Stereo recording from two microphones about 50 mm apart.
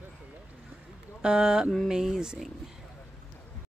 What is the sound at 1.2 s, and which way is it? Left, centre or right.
Speech, centre.